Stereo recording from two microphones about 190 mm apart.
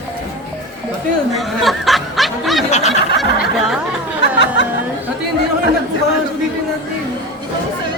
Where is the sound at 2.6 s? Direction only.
35° left (ahead or behind).